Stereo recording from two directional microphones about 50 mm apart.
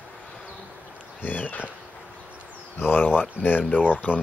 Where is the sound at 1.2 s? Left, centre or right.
Left.